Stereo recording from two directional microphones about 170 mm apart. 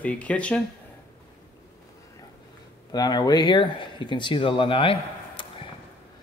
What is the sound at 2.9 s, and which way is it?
A man's voice, 25° left (ahead or behind).